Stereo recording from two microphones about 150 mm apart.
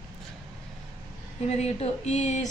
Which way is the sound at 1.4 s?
45° left (ahead or behind).